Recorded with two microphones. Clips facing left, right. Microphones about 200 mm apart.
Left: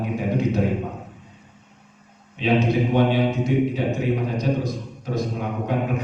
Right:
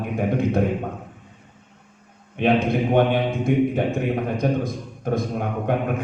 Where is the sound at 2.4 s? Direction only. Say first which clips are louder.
Even; 55° right (ahead or behind).